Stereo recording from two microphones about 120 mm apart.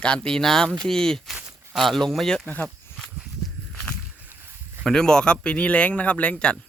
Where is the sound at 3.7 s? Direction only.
10° left (ahead or behind).